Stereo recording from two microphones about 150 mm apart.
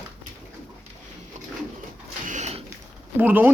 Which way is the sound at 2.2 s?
50° right (ahead or behind).